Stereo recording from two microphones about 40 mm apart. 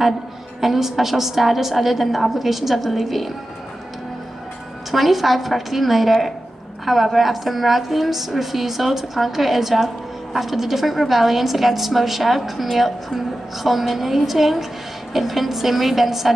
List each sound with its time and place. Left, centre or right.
0.6 s a woman's voice: centre
4.9 s a woman's voice: centre